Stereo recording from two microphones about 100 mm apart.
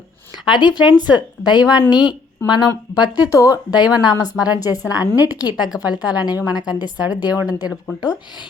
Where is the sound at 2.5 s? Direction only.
45° left (ahead or behind).